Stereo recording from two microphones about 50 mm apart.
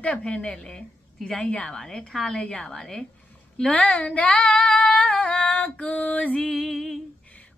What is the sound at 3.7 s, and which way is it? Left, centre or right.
Female singing, left.